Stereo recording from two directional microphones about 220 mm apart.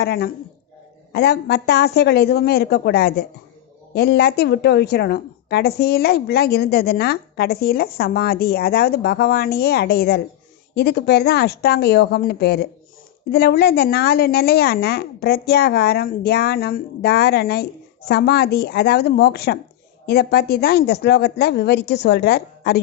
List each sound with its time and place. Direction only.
0.0 s a woman's voice: 50° left (ahead or behind)